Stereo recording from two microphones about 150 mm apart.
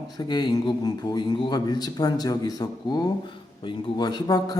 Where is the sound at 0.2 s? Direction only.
30° left (ahead or behind).